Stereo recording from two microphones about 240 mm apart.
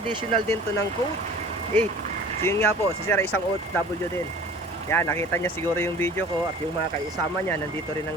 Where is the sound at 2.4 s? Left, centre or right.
Centre.